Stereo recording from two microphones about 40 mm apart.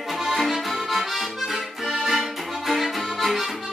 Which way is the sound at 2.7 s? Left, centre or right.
Centre.